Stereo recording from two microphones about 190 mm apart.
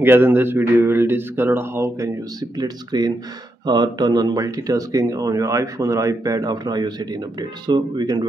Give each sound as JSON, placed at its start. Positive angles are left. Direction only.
{"t": 0.0, "sound": "speech", "side_deg": -10}